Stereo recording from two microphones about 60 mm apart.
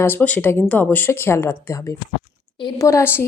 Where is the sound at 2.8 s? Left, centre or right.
Left.